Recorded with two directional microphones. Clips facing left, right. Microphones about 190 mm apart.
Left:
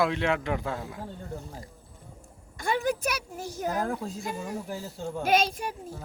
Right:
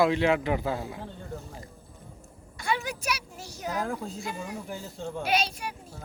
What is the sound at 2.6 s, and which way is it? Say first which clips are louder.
Speech: left 4 dB; 50° left (ahead or behind).